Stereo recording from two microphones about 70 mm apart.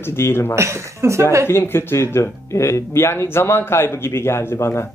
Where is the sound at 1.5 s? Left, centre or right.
Left.